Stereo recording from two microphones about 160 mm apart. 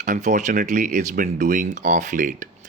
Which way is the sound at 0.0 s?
50° right (ahead or behind).